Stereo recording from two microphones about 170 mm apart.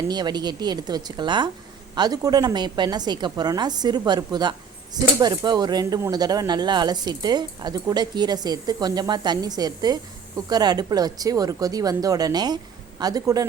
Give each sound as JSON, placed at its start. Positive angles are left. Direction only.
{"t": 0.1, "sound": "speech", "side_deg": -25}